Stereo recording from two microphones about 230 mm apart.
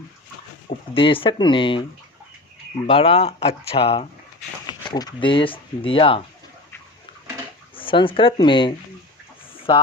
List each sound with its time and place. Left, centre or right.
0.9 s speech: left
2.8 s speech: left
7.8 s speech: left